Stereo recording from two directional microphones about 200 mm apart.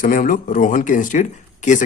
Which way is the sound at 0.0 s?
45° left (ahead or behind).